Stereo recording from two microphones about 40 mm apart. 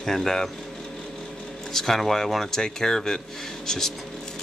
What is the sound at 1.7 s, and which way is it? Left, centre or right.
Speech, centre.